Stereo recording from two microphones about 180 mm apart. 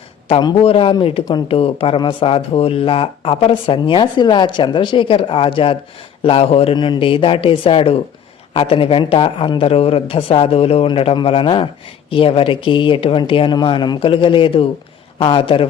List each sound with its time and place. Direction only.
0.3 s a man's voice: 30° left (ahead or behind)